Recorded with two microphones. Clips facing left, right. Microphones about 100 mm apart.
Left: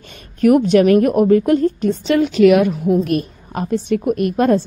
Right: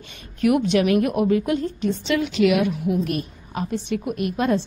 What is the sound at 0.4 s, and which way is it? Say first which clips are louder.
A woman's voice: left 7 dB; 45° left (ahead or behind).